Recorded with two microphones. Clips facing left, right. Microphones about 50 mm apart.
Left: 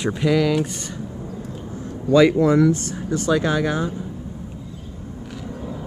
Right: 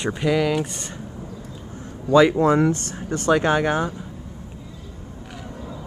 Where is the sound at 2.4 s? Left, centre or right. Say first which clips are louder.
Left 1 dB; right.